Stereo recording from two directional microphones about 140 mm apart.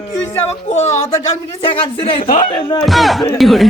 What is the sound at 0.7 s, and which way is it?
Speech, 55° left (ahead or behind).